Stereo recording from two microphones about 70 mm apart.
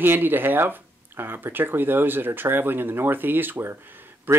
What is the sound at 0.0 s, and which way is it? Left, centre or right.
Speech, right.